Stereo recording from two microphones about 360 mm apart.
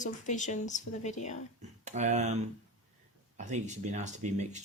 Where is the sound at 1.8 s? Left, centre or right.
Centre.